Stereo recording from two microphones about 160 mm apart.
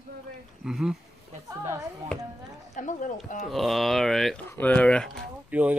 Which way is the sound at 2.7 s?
50° left (ahead or behind).